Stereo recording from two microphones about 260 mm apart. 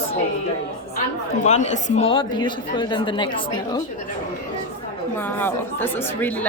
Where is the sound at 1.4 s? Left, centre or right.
Left.